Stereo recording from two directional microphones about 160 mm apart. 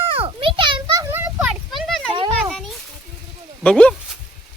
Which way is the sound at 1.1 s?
10° right (ahead or behind).